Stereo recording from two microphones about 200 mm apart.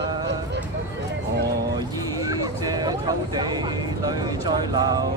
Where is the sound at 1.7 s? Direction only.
20° right (ahead or behind).